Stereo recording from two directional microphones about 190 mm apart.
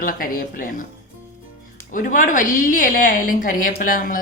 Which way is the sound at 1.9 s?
45° left (ahead or behind).